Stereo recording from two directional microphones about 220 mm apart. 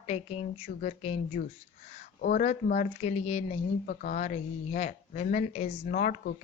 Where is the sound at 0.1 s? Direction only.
30° left (ahead or behind).